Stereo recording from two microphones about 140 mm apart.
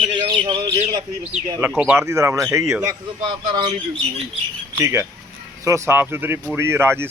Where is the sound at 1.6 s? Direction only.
15° right (ahead or behind).